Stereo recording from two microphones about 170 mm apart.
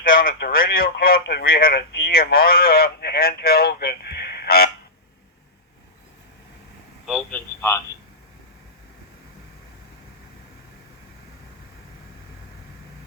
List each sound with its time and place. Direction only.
0.0 s speech: 55° left (ahead or behind)
7.0 s telephone: 5° left (ahead or behind)